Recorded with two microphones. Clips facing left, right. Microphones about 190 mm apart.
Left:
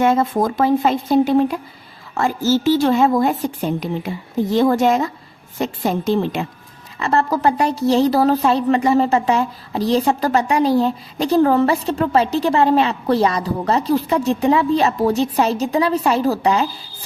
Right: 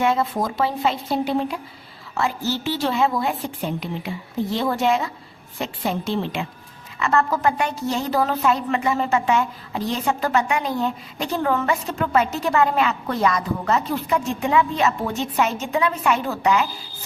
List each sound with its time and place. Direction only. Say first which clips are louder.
0.0 s a woman's voice: left 5 dB; 45° left (ahead or behind)